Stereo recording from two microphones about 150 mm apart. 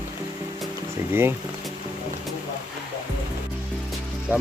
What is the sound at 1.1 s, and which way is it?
Speech, 15° right (ahead or behind).